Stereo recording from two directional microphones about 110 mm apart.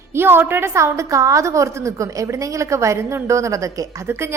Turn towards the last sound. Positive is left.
turn(degrees=-25)  # may be behind; listen again after turning